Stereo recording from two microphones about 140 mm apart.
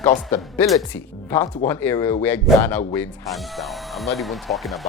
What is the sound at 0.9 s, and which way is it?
Speech, 15° left (ahead or behind).